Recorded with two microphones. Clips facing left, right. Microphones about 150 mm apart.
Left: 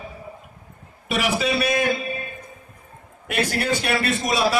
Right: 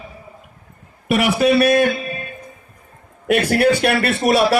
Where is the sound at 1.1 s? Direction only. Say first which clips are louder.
Right 7 dB; 60° right (ahead or behind).